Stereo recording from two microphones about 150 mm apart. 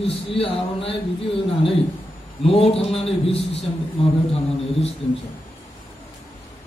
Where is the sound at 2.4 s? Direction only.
40° left (ahead or behind).